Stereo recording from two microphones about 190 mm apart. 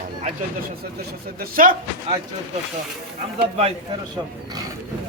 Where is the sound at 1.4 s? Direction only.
50° right (ahead or behind).